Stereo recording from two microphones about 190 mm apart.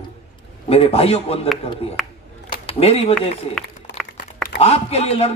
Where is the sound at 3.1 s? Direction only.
5° left (ahead or behind).